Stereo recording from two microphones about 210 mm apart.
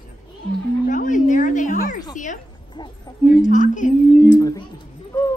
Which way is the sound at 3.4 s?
35° left (ahead or behind).